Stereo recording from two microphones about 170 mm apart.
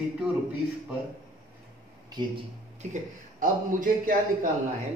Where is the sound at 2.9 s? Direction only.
50° right (ahead or behind).